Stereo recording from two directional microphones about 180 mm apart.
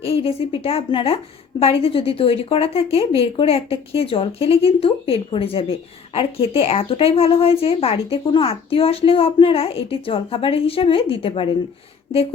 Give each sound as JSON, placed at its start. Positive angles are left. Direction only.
{"t": 0.0, "sound": "a woman's voice", "side_deg": 30}